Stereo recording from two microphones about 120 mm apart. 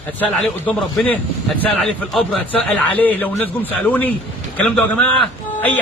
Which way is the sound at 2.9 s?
15° left (ahead or behind).